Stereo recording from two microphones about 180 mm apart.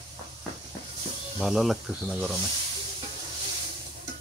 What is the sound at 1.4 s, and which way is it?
Speech, centre (ahead or behind).